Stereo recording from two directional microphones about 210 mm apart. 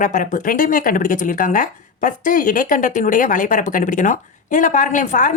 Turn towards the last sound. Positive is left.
turn(degrees=35)  # may be behind; listen again after turning